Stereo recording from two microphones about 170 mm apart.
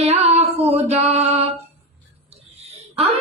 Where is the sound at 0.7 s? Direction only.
35° right (ahead or behind).